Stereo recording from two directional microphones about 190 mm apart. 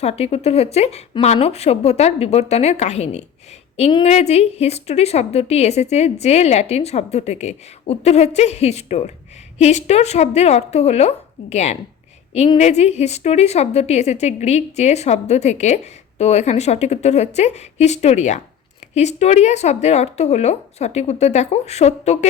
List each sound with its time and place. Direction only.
0.0 s a woman's voice: 35° left (ahead or behind)